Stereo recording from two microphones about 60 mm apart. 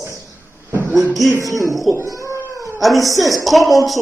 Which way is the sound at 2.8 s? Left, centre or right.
Centre.